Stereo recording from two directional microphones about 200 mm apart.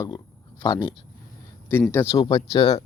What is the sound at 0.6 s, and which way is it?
Speech, 25° left (ahead or behind).